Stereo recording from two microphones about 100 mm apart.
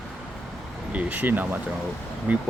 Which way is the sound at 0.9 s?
15° right (ahead or behind).